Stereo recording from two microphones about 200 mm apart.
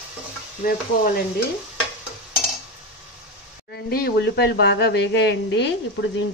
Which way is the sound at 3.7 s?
55° left (ahead or behind).